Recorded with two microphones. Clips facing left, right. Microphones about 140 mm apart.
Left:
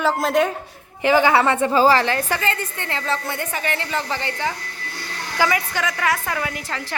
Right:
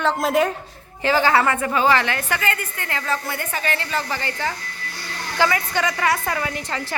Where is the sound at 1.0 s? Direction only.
15° left (ahead or behind).